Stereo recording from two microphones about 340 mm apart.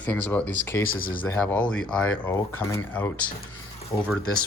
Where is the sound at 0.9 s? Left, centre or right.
Left.